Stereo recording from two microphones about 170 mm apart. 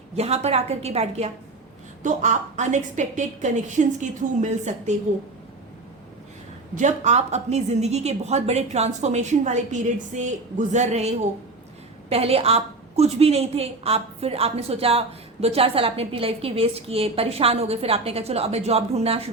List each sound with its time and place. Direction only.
0.2 s a woman's voice: 40° right (ahead or behind)
6.7 s a woman's voice: 45° right (ahead or behind)